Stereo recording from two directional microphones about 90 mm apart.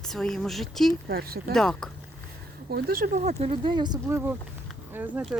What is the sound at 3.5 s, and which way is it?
Speech, 60° right (ahead or behind).